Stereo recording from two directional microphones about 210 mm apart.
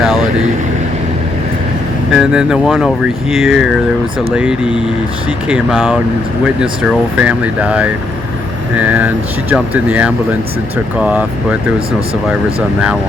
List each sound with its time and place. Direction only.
2.1 s speech: 5° right (ahead or behind)